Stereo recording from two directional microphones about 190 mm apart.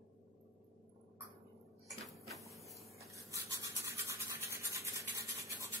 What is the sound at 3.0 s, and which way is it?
Toothbrush, 15° right (ahead or behind).